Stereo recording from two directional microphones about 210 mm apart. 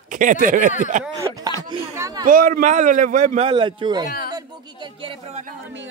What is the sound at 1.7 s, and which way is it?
Speech, 15° right (ahead or behind).